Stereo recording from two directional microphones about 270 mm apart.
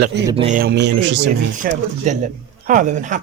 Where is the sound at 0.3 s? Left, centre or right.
Right.